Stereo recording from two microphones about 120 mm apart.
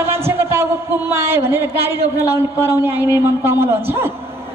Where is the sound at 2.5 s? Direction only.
20° right (ahead or behind).